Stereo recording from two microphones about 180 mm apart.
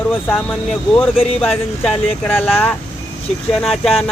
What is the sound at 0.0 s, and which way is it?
Speech, 10° left (ahead or behind).